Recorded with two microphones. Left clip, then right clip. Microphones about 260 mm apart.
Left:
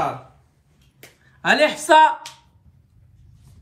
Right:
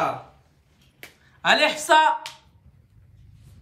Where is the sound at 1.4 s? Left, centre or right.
Centre.